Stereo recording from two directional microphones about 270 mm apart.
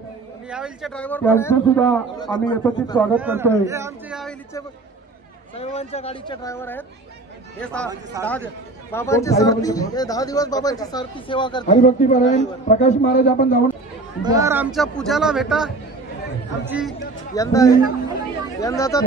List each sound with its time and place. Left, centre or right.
0.5 s a man's voice: centre
3.2 s a man's voice: centre
5.6 s a man's voice: left; by 7.9 s centre
7.9 s a man's voice: centre
8.9 s speech: centre
11.6 s a man's voice: left
14.2 s a man's voice: centre
17.4 s speech: centre